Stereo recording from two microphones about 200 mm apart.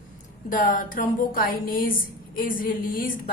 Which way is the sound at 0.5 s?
40° left (ahead or behind).